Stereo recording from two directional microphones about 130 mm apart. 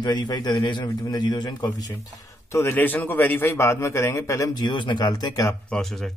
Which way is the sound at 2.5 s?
20° left (ahead or behind).